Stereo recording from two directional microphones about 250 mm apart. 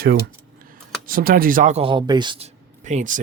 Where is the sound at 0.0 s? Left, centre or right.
Right.